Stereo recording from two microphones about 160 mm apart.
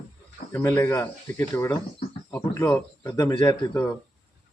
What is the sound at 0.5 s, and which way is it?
A man's voice, 20° left (ahead or behind).